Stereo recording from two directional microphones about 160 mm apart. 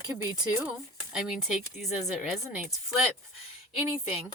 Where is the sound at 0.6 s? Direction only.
5° right (ahead or behind).